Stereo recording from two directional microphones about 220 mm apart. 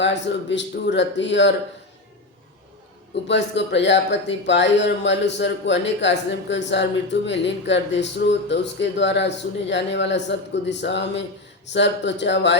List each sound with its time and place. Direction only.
0.0 s speech: 55° left (ahead or behind)
3.2 s speech: 55° left (ahead or behind)